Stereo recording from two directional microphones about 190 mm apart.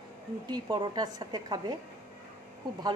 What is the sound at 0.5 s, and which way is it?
A woman's voice, 20° right (ahead or behind).